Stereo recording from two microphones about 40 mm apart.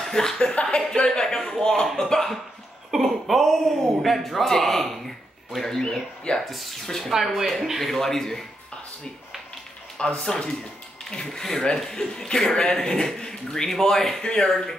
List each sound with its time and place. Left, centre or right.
0.0 s speech: centre
1.0 s speech: centre
3.0 s speech: centre
7.1 s speech: centre
9.9 s speech: left
11.1 s speech: centre